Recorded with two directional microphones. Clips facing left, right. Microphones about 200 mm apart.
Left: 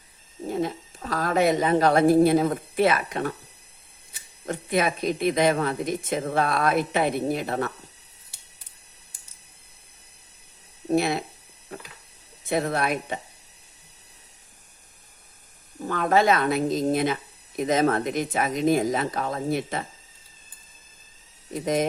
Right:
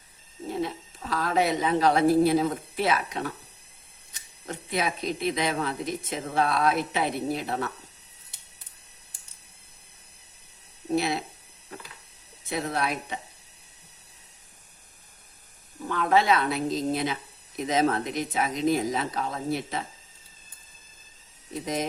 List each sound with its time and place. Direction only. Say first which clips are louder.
0.6 s a woman's voice: left 3 dB; 45° left (ahead or behind)
4.4 s speech: left 5 dB; 50° left (ahead or behind)
10.9 s speech: left 3 dB; 50° left (ahead or behind)
12.5 s speech: left 4 dB; 55° left (ahead or behind)
15.9 s speech: left 2 dB; 45° left (ahead or behind)